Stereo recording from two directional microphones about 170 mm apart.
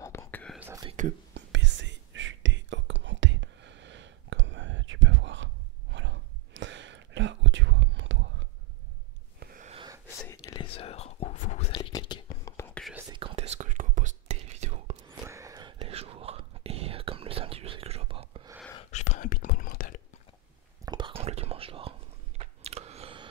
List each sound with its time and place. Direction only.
0.0 s whispering: 15° left (ahead or behind)
0.6 s whispering: 15° right (ahead or behind)
1.3 s whispering: 90° right
9.4 s gasp: 60° right (ahead or behind)
10.0 s whispering: 15° left (ahead or behind)
10.6 s whispering: 35° left (ahead or behind)
11.9 s whispering: 25° left (ahead or behind)
12.5 s whispering: 10° left (ahead or behind)
13.1 s whispering: 30° right (ahead or behind)
15.0 s whispering: 20° right (ahead or behind); by 18.5 s 35° right (ahead or behind)
18.9 s whispering: 45° left (ahead or behind)
20.8 s whispering: 25° right (ahead or behind)
22.4 s a sound: 35° right (ahead or behind)